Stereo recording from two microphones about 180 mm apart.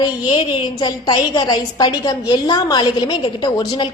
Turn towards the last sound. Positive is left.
turn(degrees=25)  # may be behind; listen again after turning